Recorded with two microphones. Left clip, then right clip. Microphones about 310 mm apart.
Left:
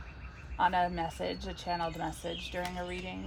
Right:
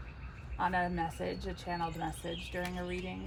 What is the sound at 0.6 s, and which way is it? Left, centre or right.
Speech, left.